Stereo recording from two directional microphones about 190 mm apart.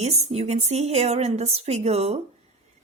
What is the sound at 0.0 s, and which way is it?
A woman's voice, 35° right (ahead or behind).